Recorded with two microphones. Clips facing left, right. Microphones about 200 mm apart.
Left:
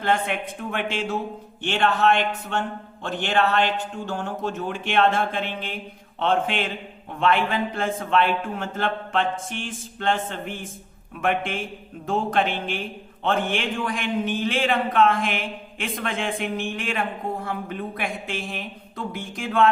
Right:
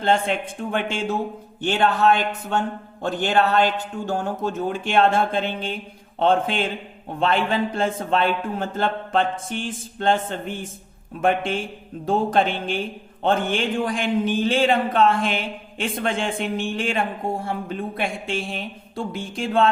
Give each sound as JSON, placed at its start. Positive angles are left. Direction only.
{"t": 0.0, "sound": "speech", "side_deg": -30}